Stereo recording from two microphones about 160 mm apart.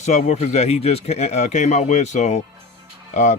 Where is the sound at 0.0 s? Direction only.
45° left (ahead or behind).